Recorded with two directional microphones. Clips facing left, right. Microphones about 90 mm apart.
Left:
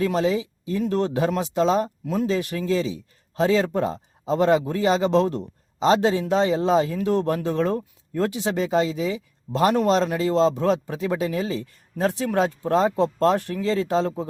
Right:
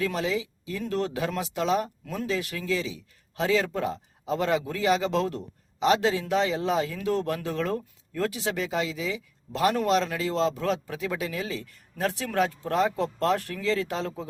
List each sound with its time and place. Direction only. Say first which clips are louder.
0.0 s speech: left 6 dB; 30° left (ahead or behind)